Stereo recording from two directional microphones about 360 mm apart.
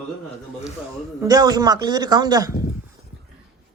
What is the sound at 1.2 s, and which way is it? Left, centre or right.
Speech, centre.